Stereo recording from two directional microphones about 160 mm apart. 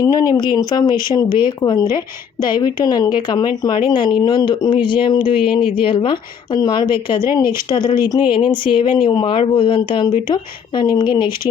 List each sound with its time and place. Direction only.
0.0 s speech: 20° left (ahead or behind)